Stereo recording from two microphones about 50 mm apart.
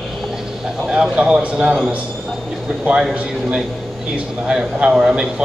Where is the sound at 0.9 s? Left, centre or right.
Centre.